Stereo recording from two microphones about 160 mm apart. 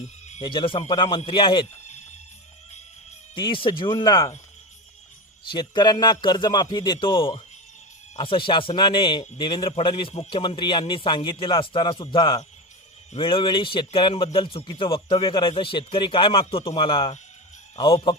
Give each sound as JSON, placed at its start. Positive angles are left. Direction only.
{"t": 0.4, "sound": "a man's voice", "side_deg": 35}
{"t": 3.3, "sound": "a man's voice", "side_deg": 30}
{"t": 5.5, "sound": "a man's voice", "side_deg": 30}